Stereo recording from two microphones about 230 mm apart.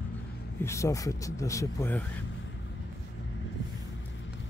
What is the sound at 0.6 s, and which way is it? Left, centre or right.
Speech, centre.